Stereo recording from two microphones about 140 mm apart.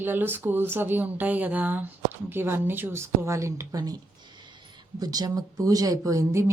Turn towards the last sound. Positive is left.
turn(degrees=-20)  # may be behind; listen again after turning